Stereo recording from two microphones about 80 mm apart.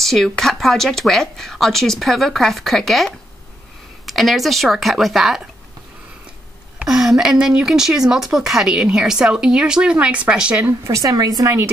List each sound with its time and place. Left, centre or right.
0.0 s speech: centre
6.8 s speech: centre
10.6 s a woman's voice: right